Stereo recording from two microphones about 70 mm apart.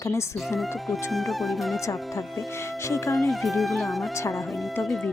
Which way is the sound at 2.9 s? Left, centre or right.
Left.